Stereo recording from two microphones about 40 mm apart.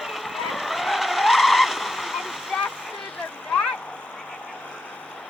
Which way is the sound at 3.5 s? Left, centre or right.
Left.